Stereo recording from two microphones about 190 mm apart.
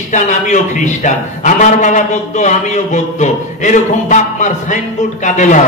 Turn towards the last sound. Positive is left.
turn(degrees=40)  # may be behind; listen again after turning